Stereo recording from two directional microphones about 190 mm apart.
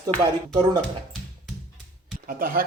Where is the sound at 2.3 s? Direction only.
50° right (ahead or behind).